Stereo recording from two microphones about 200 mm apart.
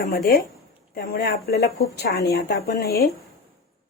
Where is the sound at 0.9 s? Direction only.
50° left (ahead or behind).